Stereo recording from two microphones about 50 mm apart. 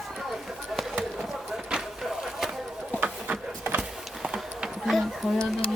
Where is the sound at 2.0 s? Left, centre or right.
Centre.